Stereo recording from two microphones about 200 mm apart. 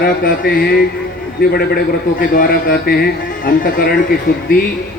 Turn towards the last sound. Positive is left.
turn(degrees=45)  # may be behind; listen again after turning